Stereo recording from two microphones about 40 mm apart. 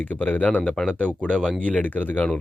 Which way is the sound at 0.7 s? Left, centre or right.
Left.